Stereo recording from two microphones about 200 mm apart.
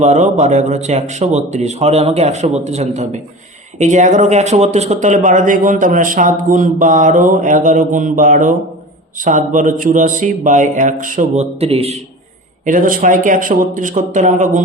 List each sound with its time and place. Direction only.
0.0 s speech: 35° right (ahead or behind)
12.6 s speech: 40° right (ahead or behind)